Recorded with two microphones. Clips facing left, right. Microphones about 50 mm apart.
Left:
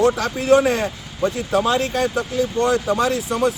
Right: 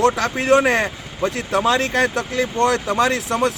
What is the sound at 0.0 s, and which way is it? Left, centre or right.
Speech, right.